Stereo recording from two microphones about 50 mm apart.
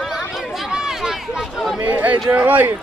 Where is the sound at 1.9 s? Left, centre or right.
Right.